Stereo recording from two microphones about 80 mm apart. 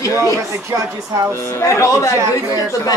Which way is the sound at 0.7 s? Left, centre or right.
Right.